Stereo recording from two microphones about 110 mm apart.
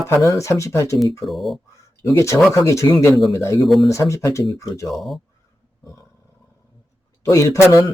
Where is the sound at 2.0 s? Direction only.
25° left (ahead or behind).